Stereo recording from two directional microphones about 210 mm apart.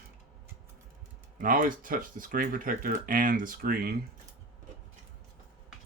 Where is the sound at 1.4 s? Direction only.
40° right (ahead or behind).